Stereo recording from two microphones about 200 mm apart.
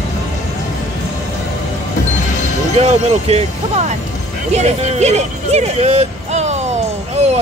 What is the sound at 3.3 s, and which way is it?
Speech, 30° right (ahead or behind).